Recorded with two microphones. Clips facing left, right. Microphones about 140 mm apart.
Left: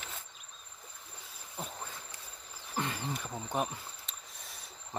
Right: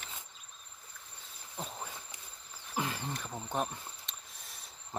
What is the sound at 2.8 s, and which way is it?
Insect, centre (ahead or behind).